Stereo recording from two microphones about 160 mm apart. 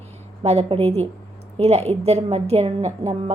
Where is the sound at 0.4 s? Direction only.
40° right (ahead or behind).